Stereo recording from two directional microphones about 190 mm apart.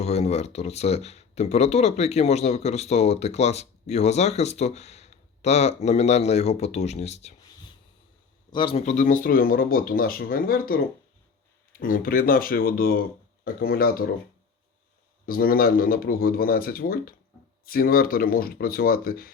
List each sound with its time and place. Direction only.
0.0 s speech: 35° left (ahead or behind)
8.5 s speech: 30° left (ahead or behind); by 10.8 s 50° left (ahead or behind)
11.8 s speech: 50° left (ahead or behind)
15.3 s speech: 50° left (ahead or behind)